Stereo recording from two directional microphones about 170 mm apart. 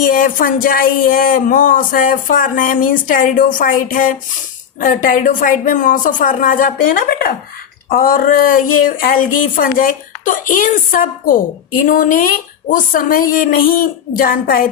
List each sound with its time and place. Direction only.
0.1 s speech: 55° left (ahead or behind)